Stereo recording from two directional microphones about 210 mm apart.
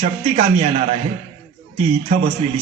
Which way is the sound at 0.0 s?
30° right (ahead or behind).